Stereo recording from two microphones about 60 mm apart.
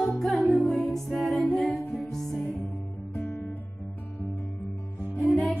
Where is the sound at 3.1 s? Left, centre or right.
Left.